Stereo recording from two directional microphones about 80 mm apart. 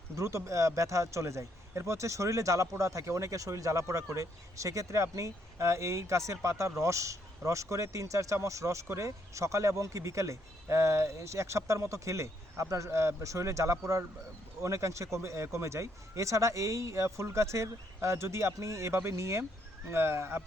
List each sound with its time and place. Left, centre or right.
0.2 s speech: right